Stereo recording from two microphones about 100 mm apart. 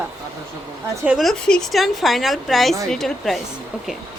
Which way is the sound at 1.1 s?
Centre (ahead or behind).